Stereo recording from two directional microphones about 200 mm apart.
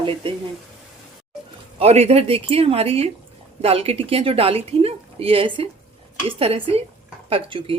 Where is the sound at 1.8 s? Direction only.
30° right (ahead or behind).